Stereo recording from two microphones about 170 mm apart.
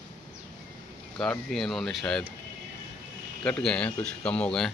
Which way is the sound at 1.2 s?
Centre (ahead or behind).